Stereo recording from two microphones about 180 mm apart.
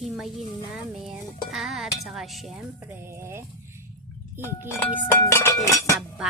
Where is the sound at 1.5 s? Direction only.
Centre (ahead or behind).